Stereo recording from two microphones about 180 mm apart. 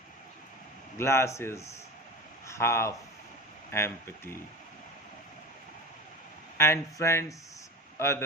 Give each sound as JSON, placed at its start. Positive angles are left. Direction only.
{"t": 0.9, "sound": "speech", "side_deg": 15}
{"t": 6.6, "sound": "a man's voice", "side_deg": 15}